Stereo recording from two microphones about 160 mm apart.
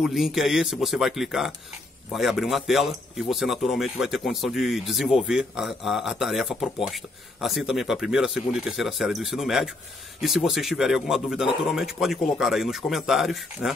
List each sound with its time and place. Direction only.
0.0 s speech: centre (ahead or behind)